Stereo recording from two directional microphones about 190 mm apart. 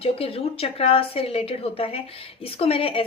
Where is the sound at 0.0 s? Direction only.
30° left (ahead or behind).